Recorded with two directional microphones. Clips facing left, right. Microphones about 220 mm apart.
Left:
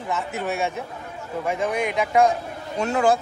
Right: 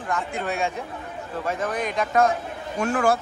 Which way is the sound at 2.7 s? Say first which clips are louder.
Left 1 dB; 20° left (ahead or behind).